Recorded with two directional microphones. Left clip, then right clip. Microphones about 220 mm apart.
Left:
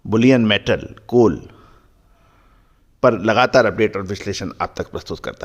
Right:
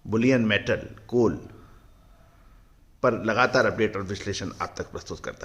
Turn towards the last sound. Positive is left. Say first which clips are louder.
# left 8 dB
turn(degrees=35)  # may be behind; listen again after turning